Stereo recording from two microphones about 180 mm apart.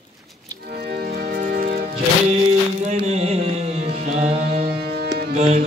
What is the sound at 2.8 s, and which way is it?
Music, 40° right (ahead or behind).